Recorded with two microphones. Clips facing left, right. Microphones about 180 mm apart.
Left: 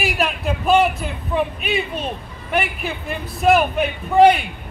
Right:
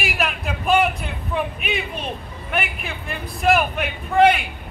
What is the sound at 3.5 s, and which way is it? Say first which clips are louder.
Speech: left 4 dB; 35° left (ahead or behind).